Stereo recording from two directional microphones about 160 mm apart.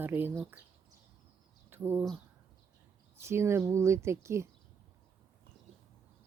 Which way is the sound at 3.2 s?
15° right (ahead or behind).